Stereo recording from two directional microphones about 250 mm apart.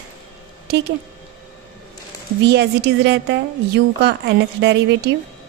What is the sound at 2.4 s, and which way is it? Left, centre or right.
A woman's voice, right.